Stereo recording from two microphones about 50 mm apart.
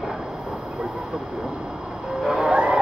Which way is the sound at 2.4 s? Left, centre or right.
Centre.